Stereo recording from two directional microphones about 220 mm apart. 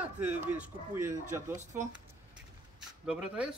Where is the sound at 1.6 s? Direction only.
35° right (ahead or behind).